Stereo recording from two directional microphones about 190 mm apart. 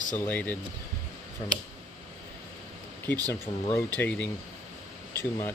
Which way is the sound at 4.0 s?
5° left (ahead or behind).